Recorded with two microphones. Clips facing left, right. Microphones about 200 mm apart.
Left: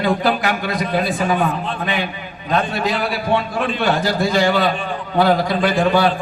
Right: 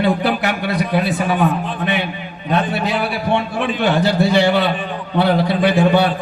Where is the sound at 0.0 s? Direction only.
65° right (ahead or behind).